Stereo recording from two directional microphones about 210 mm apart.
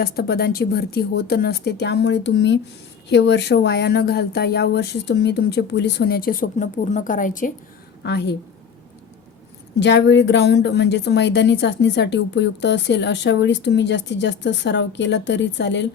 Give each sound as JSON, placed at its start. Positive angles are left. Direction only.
{"t": 0.0, "sound": "speech", "side_deg": 50}
{"t": 8.0, "sound": "speech", "side_deg": 55}
{"t": 9.8, "sound": "speech", "side_deg": 60}